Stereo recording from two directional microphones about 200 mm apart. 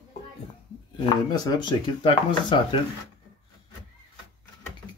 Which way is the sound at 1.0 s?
25° left (ahead or behind).